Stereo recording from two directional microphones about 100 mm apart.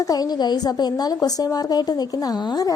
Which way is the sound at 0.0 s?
40° left (ahead or behind).